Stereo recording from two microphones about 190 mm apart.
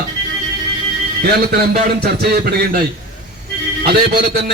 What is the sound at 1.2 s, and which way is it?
A man's voice, 55° right (ahead or behind).